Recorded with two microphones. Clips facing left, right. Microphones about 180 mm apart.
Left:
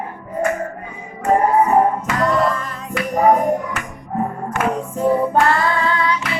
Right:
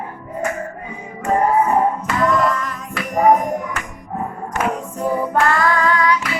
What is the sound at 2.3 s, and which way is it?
Music, 30° left (ahead or behind).